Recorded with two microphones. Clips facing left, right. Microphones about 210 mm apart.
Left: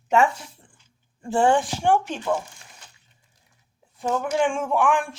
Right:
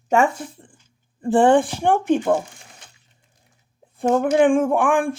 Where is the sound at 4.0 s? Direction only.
55° right (ahead or behind).